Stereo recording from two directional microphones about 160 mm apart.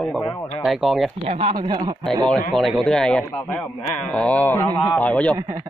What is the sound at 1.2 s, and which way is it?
Speech, 35° right (ahead or behind).